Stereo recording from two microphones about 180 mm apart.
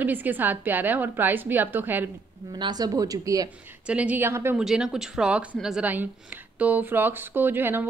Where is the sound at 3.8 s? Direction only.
5° right (ahead or behind).